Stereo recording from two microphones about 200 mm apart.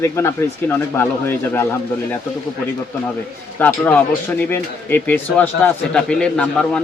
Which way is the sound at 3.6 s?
10° left (ahead or behind).